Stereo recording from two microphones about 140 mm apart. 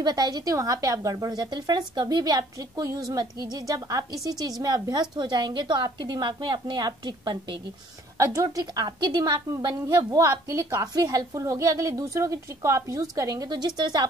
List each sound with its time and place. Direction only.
0.0 s a woman's voice: 30° right (ahead or behind)